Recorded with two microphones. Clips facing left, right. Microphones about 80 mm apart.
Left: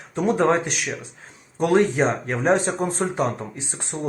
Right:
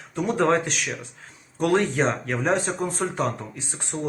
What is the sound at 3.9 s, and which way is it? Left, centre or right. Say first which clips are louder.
Speech: even; centre.